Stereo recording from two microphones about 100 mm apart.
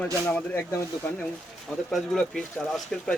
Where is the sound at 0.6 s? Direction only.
25° left (ahead or behind).